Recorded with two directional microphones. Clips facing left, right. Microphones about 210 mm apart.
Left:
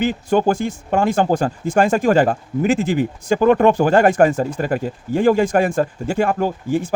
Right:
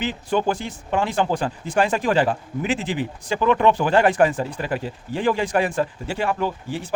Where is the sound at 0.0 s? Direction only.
45° left (ahead or behind).